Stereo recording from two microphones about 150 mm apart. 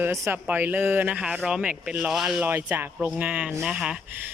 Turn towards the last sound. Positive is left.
turn(degrees=-5)  # may be behind; listen again after turning